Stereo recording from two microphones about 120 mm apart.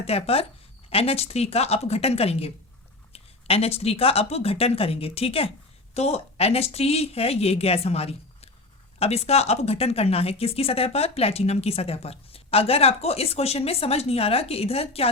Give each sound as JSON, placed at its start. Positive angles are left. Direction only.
{"t": 0.0, "sound": "a woman's voice", "side_deg": 60}